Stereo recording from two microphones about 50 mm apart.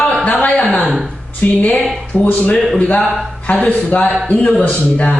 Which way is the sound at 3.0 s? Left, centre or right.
Centre.